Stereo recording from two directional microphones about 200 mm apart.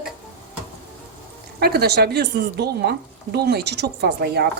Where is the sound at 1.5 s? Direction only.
50° right (ahead or behind).